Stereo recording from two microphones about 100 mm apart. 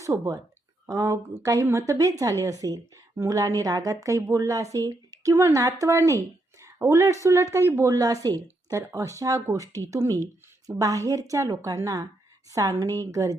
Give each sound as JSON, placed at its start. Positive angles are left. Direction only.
{"t": 0.1, "sound": "speech", "side_deg": -30}